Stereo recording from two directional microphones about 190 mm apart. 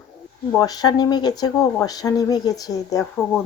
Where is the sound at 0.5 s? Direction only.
20° left (ahead or behind).